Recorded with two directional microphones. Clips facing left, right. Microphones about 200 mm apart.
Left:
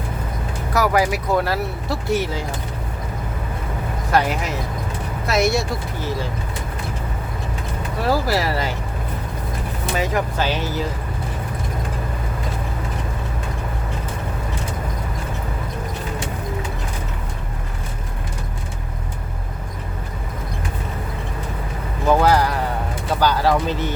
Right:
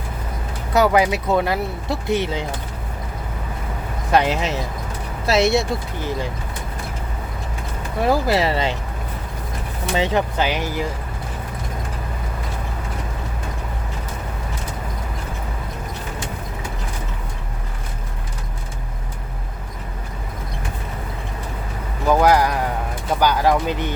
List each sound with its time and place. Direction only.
0.7 s speech: 20° right (ahead or behind)
4.1 s speech: 20° right (ahead or behind)
8.0 s speech: 20° right (ahead or behind)
10.0 s speech: 25° right (ahead or behind)
22.1 s clip-clop: 15° right (ahead or behind)
23.2 s speech: 15° right (ahead or behind)